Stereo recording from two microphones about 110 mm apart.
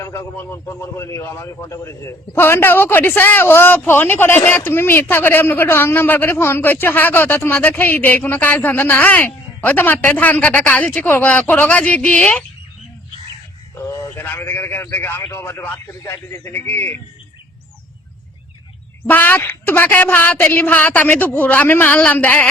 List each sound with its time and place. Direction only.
0.0 s a man's voice: 25° left (ahead or behind)
13.7 s a man's voice: 20° left (ahead or behind)
19.0 s a woman's voice: 15° left (ahead or behind)